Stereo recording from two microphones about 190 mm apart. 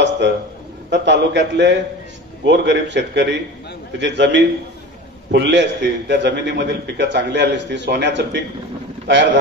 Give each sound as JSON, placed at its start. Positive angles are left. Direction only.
{"t": 0.8, "sound": "a man's voice", "side_deg": -65}